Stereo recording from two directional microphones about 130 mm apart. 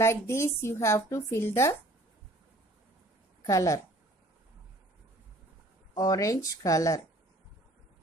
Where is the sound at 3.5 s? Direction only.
25° left (ahead or behind).